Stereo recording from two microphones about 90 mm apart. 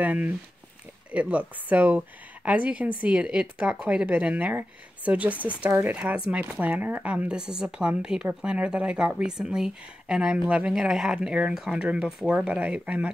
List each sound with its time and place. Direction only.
0.0 s speech: 20° right (ahead or behind)